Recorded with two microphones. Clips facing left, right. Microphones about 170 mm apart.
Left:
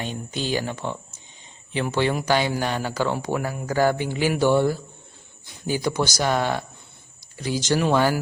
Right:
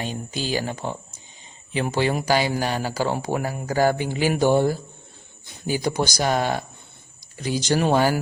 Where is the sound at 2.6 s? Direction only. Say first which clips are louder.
Even; 35° right (ahead or behind).